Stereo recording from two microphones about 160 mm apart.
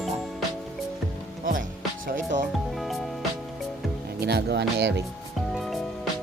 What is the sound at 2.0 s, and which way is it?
Speech, 55° right (ahead or behind).